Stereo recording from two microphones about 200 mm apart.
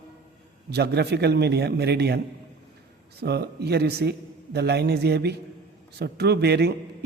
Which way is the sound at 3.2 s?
55° right (ahead or behind).